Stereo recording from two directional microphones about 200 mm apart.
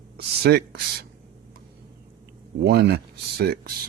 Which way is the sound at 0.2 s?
55° right (ahead or behind).